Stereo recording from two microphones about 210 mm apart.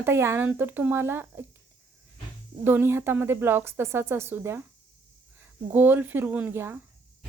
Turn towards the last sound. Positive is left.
turn(degrees=-10)  # may be behind; listen again after turning